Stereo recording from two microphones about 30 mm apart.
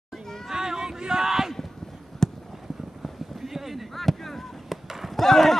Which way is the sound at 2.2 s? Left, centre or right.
Centre.